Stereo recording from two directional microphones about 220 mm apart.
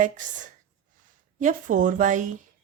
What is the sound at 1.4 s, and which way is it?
A woman's voice, 35° right (ahead or behind).